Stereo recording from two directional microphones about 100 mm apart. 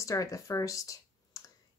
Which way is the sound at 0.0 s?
35° left (ahead or behind).